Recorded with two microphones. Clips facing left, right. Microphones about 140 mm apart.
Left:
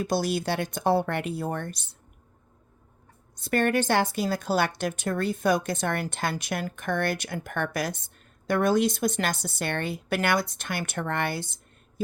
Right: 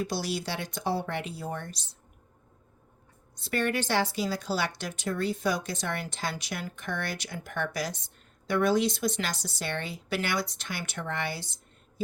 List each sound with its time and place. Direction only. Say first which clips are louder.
0.0 s a woman's voice: left 5 dB; 50° left (ahead or behind)
3.3 s a woman's voice: left 5 dB; 50° left (ahead or behind)